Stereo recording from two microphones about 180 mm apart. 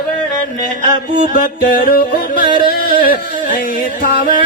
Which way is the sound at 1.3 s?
50° left (ahead or behind).